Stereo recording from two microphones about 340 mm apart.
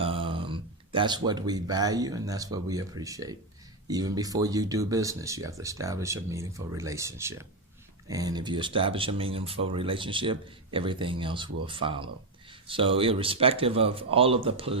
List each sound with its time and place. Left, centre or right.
0.0 s speech: centre